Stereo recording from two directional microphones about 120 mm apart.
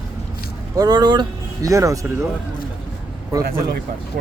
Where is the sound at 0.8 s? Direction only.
35° right (ahead or behind).